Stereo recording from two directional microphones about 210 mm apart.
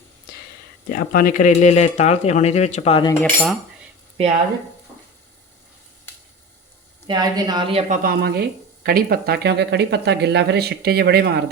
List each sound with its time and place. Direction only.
0.9 s speech: 40° left (ahead or behind)
3.1 s cutlery: 10° left (ahead or behind)
7.1 s speech: 20° right (ahead or behind)
8.0 s speech: 50° right (ahead or behind)